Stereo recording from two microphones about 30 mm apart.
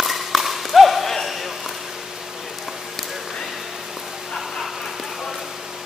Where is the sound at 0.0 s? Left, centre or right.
Centre.